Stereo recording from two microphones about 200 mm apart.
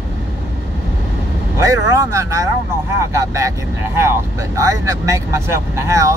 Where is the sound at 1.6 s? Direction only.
15° right (ahead or behind).